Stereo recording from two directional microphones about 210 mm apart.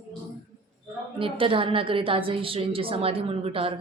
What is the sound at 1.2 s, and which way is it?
A woman's voice, 25° right (ahead or behind).